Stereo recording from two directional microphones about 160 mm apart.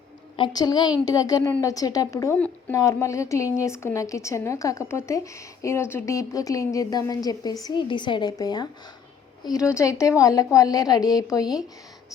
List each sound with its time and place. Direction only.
0.3 s a woman's voice: 30° left (ahead or behind)
9.7 s a woman's voice: 20° left (ahead or behind)